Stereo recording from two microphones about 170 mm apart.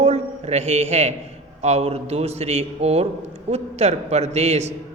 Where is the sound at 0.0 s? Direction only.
40° right (ahead or behind).